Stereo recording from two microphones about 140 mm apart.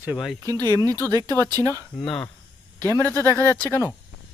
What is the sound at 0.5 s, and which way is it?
Speech, 25° right (ahead or behind).